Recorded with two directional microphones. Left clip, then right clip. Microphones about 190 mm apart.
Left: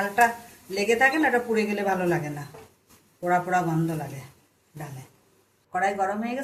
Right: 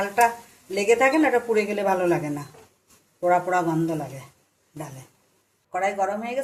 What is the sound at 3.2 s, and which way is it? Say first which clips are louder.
Speech: right 3 dB; 35° right (ahead or behind).